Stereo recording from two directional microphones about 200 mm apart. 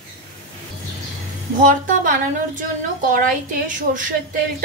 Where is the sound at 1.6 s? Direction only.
40° right (ahead or behind).